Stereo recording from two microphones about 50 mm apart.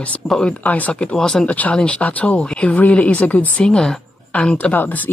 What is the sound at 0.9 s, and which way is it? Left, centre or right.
Speech, centre.